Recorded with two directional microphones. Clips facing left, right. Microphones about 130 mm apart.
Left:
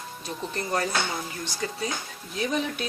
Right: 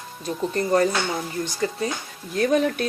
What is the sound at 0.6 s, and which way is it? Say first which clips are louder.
Speech: right 7 dB; 40° right (ahead or behind).